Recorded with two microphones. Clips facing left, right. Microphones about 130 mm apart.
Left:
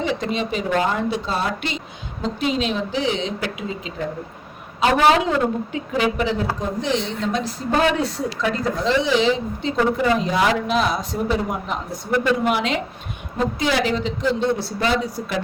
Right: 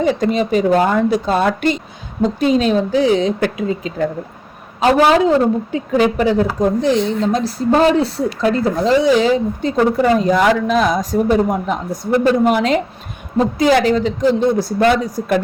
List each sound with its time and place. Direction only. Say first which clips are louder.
0.0 s a man's voice: right 7 dB; 45° right (ahead or behind)